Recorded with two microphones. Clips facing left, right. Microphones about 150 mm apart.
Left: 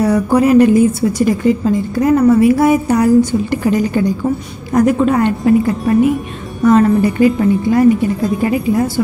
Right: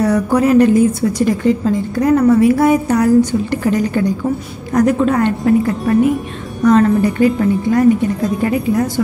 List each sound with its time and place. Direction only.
0.0 s a woman's voice: 10° left (ahead or behind)
8.4 s a woman's voice: 10° left (ahead or behind)